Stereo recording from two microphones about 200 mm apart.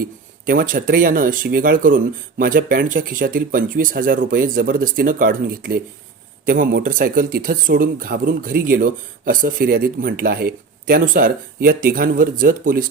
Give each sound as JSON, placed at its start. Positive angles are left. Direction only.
{"t": 0.0, "sound": "speech", "side_deg": -45}